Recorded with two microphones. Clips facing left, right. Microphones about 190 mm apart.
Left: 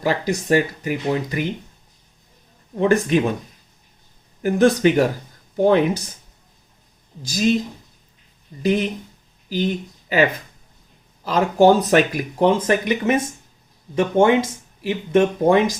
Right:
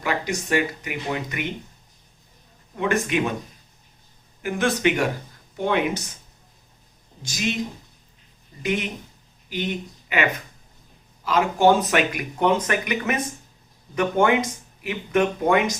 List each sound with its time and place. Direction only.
0.0 s speech: 35° left (ahead or behind)
2.7 s speech: 35° left (ahead or behind)
4.4 s speech: 40° left (ahead or behind)
7.2 s speech: 35° left (ahead or behind)
8.6 s speech: 35° left (ahead or behind)
11.3 s speech: 35° left (ahead or behind)